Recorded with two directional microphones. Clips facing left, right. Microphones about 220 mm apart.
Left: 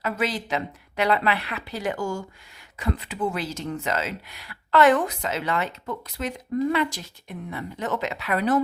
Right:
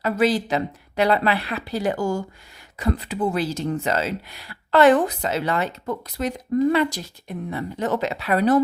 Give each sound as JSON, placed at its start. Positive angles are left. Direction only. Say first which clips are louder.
{"t": 0.0, "sound": "speech", "louder": "right 7 dB", "side_deg": -35}